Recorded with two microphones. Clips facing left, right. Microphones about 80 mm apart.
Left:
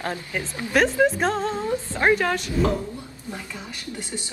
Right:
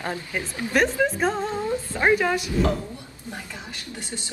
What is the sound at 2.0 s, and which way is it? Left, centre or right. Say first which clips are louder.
Speech: even; centre.